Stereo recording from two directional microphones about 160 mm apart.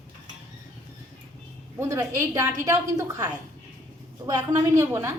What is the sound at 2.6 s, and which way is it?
A woman's voice, 20° right (ahead or behind).